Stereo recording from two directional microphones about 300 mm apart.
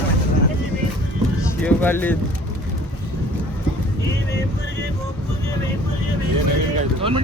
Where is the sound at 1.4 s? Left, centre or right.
Centre.